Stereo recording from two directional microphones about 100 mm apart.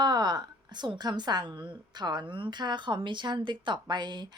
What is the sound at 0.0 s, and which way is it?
A woman's voice, 45° right (ahead or behind).